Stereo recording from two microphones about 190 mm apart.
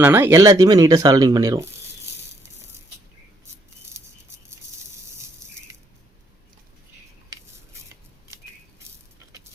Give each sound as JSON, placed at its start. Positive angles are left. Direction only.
{"t": 0.0, "sound": "speech", "side_deg": -15}